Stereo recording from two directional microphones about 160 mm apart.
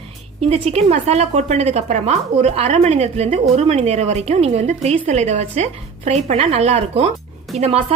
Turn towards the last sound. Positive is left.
turn(degrees=-40)  # may be behind; listen again after turning